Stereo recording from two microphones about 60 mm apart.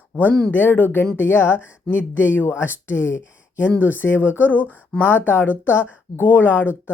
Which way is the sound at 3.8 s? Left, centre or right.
Left.